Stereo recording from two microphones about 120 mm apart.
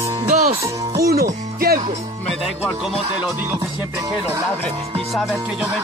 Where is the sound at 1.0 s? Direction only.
30° right (ahead or behind).